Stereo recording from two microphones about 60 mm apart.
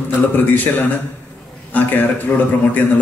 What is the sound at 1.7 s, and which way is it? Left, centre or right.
A man's voice, left.